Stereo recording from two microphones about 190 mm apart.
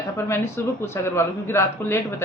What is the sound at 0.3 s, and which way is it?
Speech, 15° left (ahead or behind).